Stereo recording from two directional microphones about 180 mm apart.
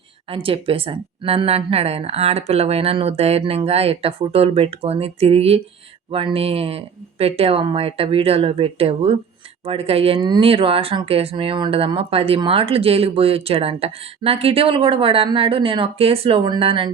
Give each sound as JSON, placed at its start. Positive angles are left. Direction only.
{"t": 0.3, "sound": "speech", "side_deg": -30}